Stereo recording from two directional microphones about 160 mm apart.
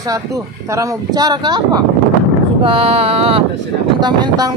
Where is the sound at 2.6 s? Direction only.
35° right (ahead or behind).